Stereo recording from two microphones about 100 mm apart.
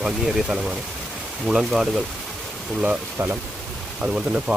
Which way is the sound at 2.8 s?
20° right (ahead or behind).